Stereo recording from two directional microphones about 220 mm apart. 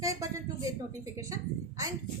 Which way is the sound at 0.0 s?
15° right (ahead or behind).